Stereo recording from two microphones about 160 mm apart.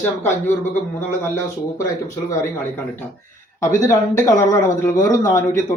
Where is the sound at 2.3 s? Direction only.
15° left (ahead or behind).